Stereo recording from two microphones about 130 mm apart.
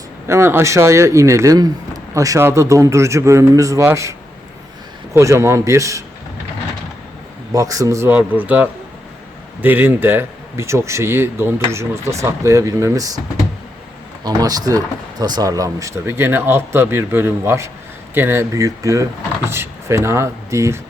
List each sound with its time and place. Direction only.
0.3 s speech: 20° right (ahead or behind)
5.1 s speech: 20° right (ahead or behind)
7.5 s speech: 25° right (ahead or behind)
14.3 s speech: 30° right (ahead or behind)